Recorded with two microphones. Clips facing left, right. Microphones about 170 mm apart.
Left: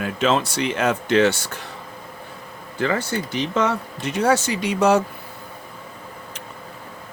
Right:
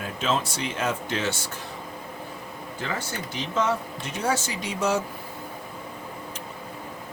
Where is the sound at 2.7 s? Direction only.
70° left (ahead or behind).